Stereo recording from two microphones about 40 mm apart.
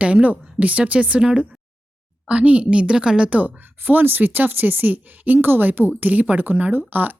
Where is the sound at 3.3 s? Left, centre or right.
Right.